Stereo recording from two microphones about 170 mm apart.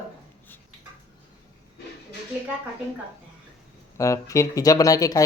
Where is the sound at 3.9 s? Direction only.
20° left (ahead or behind).